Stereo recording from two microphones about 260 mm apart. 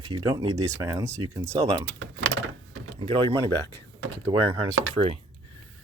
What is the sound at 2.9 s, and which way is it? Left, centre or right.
Speech, centre.